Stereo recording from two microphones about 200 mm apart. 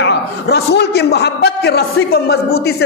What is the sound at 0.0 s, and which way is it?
A man's voice, 55° left (ahead or behind).